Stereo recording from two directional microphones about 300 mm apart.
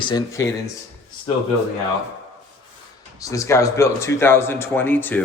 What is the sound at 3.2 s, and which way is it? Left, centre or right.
Speech, centre.